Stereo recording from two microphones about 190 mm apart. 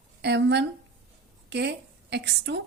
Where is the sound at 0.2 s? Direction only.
65° right (ahead or behind).